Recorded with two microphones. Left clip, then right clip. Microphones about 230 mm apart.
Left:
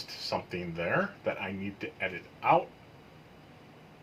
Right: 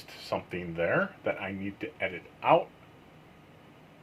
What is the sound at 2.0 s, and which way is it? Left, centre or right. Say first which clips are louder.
Speech: right 1 dB; right.